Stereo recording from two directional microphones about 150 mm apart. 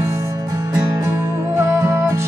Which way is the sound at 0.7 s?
20° right (ahead or behind).